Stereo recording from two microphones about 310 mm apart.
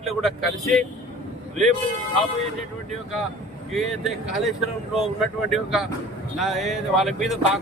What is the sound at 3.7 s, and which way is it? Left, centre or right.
Speech, centre.